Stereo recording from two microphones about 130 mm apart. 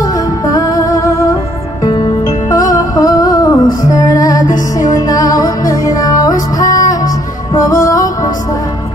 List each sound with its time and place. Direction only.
0.0 s music: 30° left (ahead or behind)
2.7 s music: 30° left (ahead or behind)